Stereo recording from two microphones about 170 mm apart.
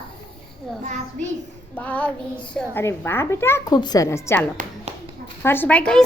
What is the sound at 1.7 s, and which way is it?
A child's voice, 10° left (ahead or behind).